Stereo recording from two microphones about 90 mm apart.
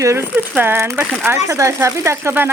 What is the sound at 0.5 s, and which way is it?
Speech, 25° right (ahead or behind).